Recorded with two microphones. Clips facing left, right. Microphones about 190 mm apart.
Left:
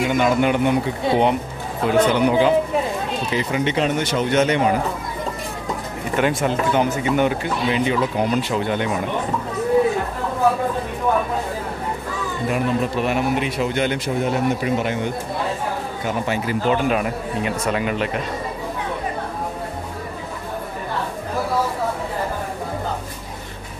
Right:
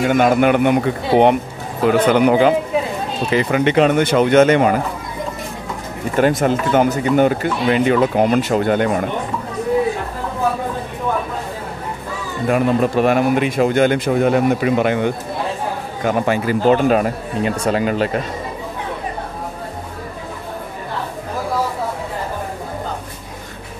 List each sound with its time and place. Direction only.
0.0 s speech: 55° right (ahead or behind)
6.1 s speech: 40° right (ahead or behind)
7.6 s speech: 55° right (ahead or behind)
12.4 s speech: 50° right (ahead or behind); by 15.0 s 70° right (ahead or behind)
16.1 s speech: 50° right (ahead or behind)
16.6 s speech: 40° right (ahead or behind)